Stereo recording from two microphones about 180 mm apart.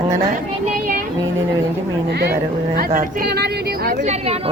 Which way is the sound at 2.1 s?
65° right (ahead or behind).